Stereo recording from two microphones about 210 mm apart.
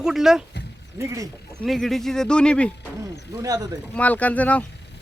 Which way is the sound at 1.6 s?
Centre (ahead or behind).